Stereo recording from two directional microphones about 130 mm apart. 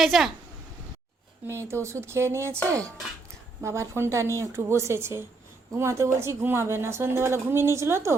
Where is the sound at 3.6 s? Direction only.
20° right (ahead or behind).